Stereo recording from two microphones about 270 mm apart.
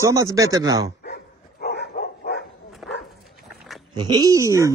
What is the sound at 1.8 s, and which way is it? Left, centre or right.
Dog, left.